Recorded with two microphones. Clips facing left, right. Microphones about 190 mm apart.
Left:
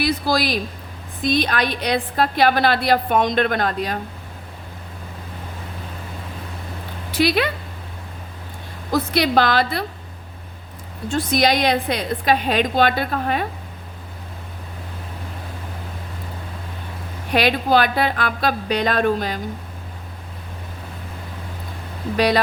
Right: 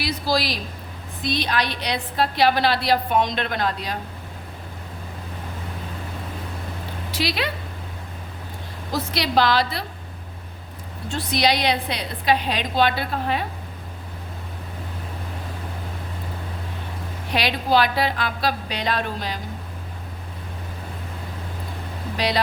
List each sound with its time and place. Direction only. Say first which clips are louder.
0.0 s a woman's voice: left 4 dB; 55° left (ahead or behind)
7.1 s speech: left 7 dB; 55° left (ahead or behind)
8.9 s a woman's voice: left 6 dB; 55° left (ahead or behind)
11.1 s a woman's voice: left 3 dB; 50° left (ahead or behind)
17.3 s a woman's voice: left 3 dB; 50° left (ahead or behind)